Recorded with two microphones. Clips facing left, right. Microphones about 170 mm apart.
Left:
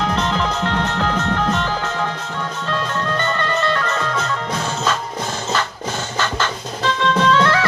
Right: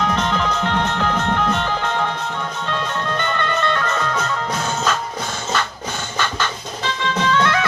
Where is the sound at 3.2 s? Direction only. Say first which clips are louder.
Even; 40° left (ahead or behind).